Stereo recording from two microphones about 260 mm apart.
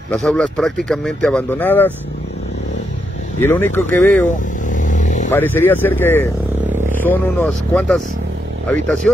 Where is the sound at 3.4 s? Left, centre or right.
Centre.